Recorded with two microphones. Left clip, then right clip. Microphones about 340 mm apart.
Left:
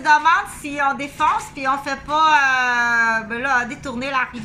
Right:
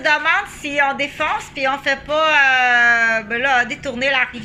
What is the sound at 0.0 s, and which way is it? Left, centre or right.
A woman's voice, centre.